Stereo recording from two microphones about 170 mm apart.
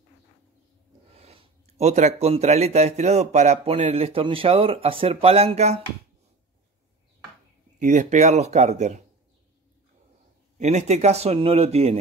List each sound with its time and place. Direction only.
1.1 s speech: 35° right (ahead or behind)
7.8 s speech: 45° right (ahead or behind)
10.6 s speech: 45° right (ahead or behind)